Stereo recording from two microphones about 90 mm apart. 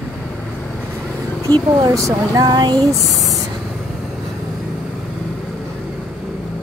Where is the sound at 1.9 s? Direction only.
35° right (ahead or behind).